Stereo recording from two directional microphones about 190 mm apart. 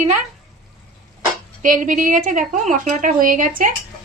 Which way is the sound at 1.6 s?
45° right (ahead or behind).